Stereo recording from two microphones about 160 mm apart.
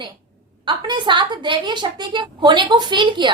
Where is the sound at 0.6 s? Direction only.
30° right (ahead or behind).